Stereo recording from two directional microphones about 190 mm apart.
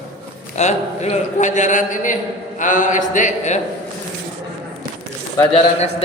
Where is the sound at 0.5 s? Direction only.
35° left (ahead or behind).